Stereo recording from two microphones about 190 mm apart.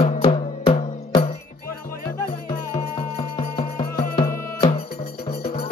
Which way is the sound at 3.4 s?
25° left (ahead or behind).